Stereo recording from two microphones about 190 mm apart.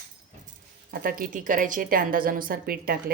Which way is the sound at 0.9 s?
50° right (ahead or behind).